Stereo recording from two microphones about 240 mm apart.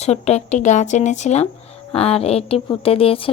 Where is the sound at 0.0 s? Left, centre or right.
Left.